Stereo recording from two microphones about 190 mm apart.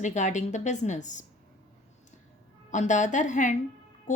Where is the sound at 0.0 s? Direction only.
40° left (ahead or behind).